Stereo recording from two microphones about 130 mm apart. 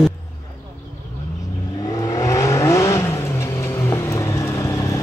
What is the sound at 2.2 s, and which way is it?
Vehicle, 25° left (ahead or behind).